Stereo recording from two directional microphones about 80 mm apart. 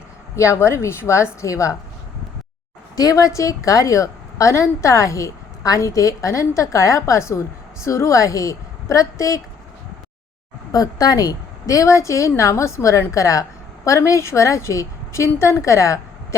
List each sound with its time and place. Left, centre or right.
0.3 s a woman's voice: left
2.9 s a woman's voice: left
10.7 s a woman's voice: left